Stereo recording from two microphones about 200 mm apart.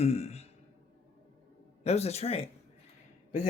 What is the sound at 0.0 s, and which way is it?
Speech, 30° left (ahead or behind).